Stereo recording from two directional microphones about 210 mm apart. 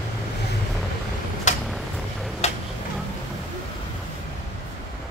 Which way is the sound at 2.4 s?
30° left (ahead or behind).